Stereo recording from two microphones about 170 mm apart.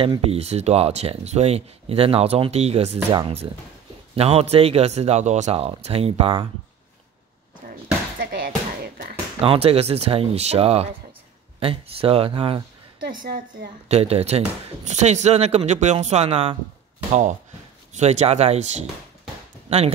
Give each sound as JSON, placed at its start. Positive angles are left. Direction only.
{"t": 0.0, "sound": "speech", "side_deg": -35}
{"t": 8.2, "sound": "music", "side_deg": -55}
{"t": 9.4, "sound": "speech", "side_deg": -35}
{"t": 13.1, "sound": "a woman's voice", "side_deg": -70}
{"t": 13.8, "sound": "speech", "side_deg": -35}
{"t": 17.9, "sound": "speech", "side_deg": -40}